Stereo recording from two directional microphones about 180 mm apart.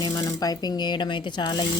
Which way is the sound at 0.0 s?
20° left (ahead or behind).